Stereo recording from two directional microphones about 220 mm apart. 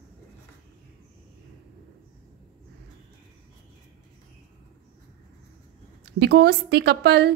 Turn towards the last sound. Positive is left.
turn(degrees=-50)  # may be behind; listen again after turning